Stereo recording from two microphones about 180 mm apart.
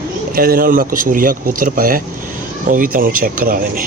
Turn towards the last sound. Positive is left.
turn(degrees=-55)  # may be behind; listen again after turning